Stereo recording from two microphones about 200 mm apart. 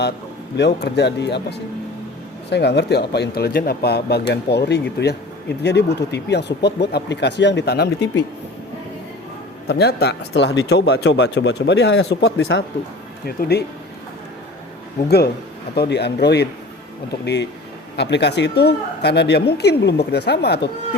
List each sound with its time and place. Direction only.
0.5 s speech: 55° left (ahead or behind)
9.6 s speech: 55° left (ahead or behind)
15.7 s speech: 55° left (ahead or behind)